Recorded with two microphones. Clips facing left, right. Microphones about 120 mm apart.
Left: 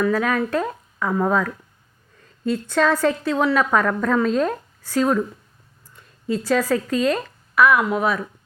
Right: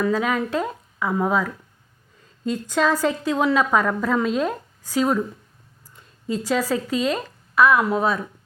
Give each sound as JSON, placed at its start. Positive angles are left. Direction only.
{"t": 0.1, "sound": "a woman's voice", "side_deg": -20}